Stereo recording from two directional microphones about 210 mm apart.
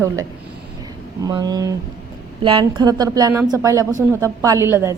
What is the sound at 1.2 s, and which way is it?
Speech, 20° right (ahead or behind).